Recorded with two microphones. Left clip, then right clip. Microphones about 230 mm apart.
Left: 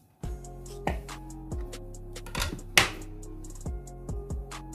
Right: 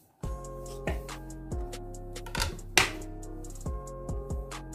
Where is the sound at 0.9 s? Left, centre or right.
Centre.